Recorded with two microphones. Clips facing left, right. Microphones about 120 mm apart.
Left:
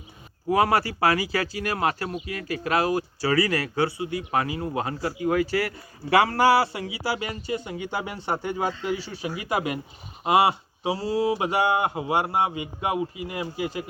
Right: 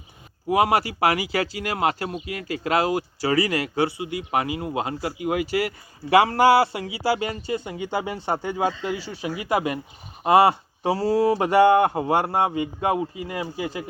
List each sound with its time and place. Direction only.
0.4 s a man's voice: 15° right (ahead or behind)
9.5 s speech: 35° right (ahead or behind)